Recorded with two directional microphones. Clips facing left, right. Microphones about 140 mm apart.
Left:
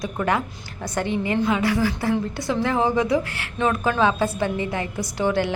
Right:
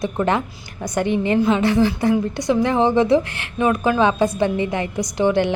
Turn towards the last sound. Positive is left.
turn(degrees=-20)  # may be behind; listen again after turning